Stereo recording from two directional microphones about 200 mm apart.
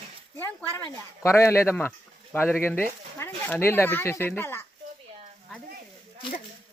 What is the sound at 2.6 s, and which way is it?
Speech, 10° left (ahead or behind).